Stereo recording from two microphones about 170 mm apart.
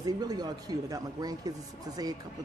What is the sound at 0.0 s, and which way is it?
Speech, 25° right (ahead or behind).